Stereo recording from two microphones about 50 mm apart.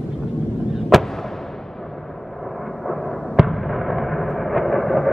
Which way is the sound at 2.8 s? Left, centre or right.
Centre.